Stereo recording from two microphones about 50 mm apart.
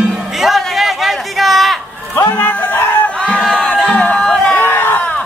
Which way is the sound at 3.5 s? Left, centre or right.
Left.